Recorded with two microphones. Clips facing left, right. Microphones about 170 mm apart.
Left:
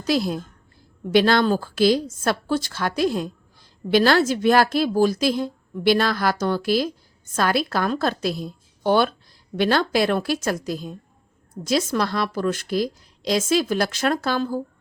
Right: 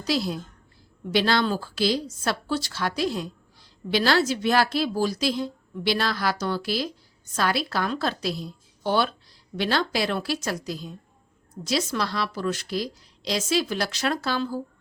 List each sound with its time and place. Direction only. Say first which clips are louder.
0.0 s a woman's voice: left 4 dB; 50° left (ahead or behind)